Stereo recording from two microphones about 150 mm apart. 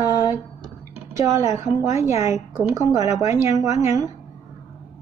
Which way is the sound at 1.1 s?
20° right (ahead or behind).